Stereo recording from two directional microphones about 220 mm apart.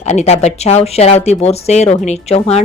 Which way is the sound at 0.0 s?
30° left (ahead or behind).